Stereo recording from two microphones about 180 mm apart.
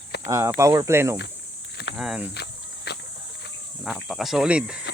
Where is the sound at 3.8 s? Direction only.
5° right (ahead or behind).